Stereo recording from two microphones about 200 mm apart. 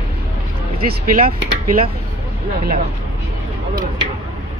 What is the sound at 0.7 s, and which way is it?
Speech, 45° right (ahead or behind).